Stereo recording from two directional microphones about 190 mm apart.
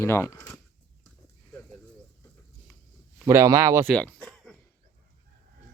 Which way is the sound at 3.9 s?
Centre (ahead or behind).